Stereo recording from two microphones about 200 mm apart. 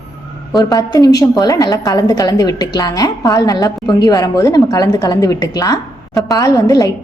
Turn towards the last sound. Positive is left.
turn(degrees=15)  # may be behind; listen again after turning